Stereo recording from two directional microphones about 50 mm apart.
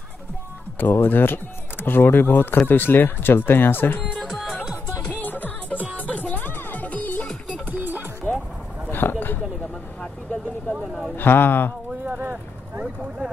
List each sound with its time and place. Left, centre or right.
0.7 s speech: left
4.3 s music: centre
5.0 s music: left
7.6 s music: right
9.0 s a sound: left
10.7 s a sound: centre
11.1 s a man's voice: left
12.2 s vehicle: right
12.8 s vehicle: centre